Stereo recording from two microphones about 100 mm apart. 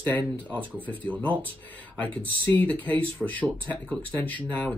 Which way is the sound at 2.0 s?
15° left (ahead or behind).